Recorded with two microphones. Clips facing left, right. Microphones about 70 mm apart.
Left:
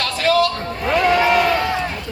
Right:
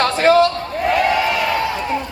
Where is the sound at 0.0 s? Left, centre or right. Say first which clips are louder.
Right 5 dB; right.